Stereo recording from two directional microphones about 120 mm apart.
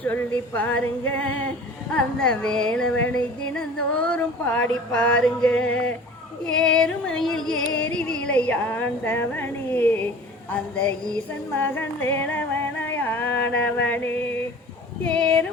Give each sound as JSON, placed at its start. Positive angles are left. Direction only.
{"t": 0.0, "sound": "music", "side_deg": 15}